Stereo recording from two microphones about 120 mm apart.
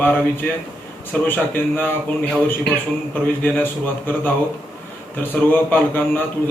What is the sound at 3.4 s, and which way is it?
A man's voice, 15° left (ahead or behind).